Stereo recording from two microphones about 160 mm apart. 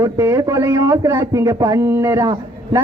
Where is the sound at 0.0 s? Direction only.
20° right (ahead or behind).